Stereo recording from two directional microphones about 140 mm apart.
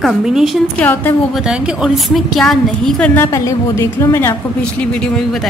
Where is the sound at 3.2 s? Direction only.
20° left (ahead or behind).